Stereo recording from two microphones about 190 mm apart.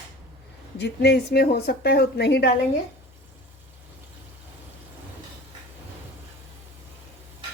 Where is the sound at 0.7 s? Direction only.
60° left (ahead or behind).